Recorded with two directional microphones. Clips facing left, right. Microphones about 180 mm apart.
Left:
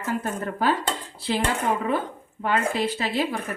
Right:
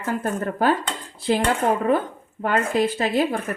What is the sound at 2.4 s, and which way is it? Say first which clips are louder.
Speech: right 3 dB; 50° right (ahead or behind).